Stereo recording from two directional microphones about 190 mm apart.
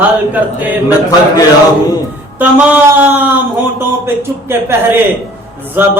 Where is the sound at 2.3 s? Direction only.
10° right (ahead or behind).